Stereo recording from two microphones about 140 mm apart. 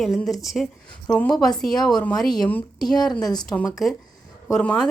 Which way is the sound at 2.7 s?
30° left (ahead or behind).